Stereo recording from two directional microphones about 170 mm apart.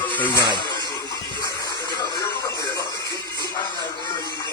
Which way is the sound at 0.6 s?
25° left (ahead or behind).